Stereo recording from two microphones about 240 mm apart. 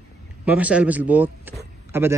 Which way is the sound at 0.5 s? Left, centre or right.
Centre.